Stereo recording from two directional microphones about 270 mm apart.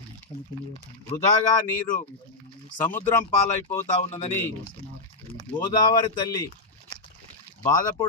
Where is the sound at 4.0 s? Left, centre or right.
Left.